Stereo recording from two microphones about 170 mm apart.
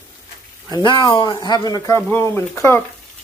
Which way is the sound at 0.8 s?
25° left (ahead or behind).